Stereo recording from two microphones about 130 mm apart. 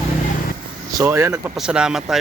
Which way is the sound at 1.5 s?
5° right (ahead or behind).